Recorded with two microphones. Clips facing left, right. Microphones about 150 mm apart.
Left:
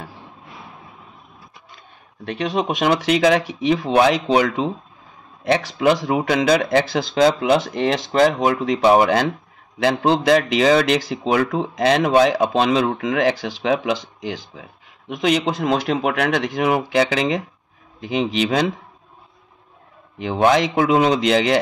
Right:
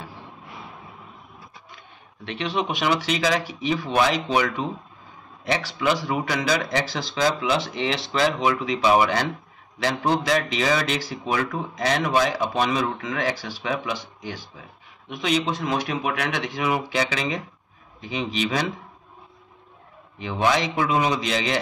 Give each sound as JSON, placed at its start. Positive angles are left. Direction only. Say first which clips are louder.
{"t": 2.2, "sound": "a man's voice", "louder": "left 5 dB", "side_deg": 45}
{"t": 5.5, "sound": "a man's voice", "louder": "left 6 dB", "side_deg": 55}
{"t": 20.2, "sound": "a man's voice", "louder": "left 6 dB", "side_deg": 60}